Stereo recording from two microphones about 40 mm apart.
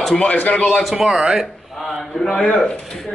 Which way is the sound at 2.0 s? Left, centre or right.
Centre.